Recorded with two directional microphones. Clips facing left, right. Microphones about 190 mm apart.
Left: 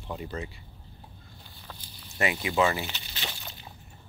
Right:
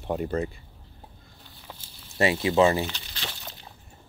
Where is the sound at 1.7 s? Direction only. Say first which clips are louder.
Right 1 dB; 20° right (ahead or behind).